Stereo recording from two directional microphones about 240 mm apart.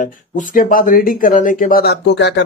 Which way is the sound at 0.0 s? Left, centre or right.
Left.